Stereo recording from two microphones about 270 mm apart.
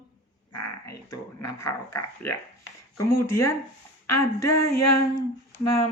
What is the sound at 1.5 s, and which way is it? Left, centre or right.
Speech, centre.